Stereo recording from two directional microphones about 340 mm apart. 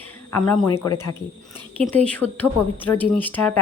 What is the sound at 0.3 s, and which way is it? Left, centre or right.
Speech, centre.